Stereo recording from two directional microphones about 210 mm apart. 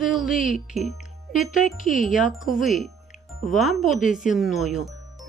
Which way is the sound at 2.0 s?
Centre (ahead or behind).